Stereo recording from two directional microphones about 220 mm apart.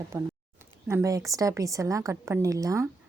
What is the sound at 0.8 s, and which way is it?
A woman's voice, 15° right (ahead or behind).